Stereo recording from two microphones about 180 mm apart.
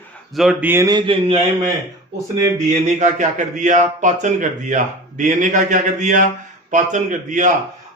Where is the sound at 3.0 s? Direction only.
45° right (ahead or behind).